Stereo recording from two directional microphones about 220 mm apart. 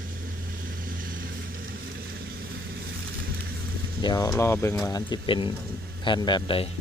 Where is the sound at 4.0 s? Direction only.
20° left (ahead or behind).